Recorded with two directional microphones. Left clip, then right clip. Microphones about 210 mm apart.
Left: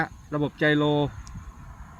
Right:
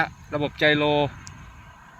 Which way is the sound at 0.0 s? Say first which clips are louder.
Right 3 dB; 30° right (ahead or behind).